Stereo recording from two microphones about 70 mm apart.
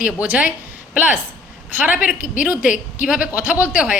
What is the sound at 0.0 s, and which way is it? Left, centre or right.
Speech, centre.